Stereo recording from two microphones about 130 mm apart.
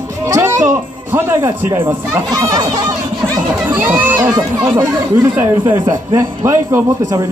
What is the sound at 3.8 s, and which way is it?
Speech, 15° right (ahead or behind).